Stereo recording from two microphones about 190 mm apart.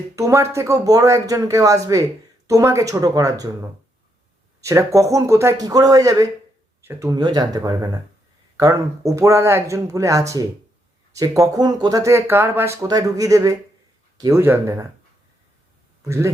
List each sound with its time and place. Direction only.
0.2 s speech: 15° right (ahead or behind)
4.6 s speech: 15° right (ahead or behind)
16.0 s speech: 15° right (ahead or behind)